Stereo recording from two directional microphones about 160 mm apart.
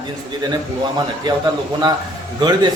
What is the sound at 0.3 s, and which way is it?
A man's voice, 25° right (ahead or behind).